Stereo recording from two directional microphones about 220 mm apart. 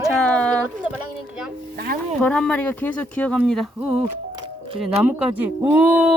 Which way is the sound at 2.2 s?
5° left (ahead or behind).